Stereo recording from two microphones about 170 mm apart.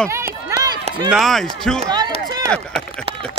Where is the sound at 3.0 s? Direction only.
30° right (ahead or behind).